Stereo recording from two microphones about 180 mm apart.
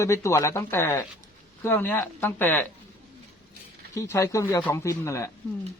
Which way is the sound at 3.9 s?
15° left (ahead or behind).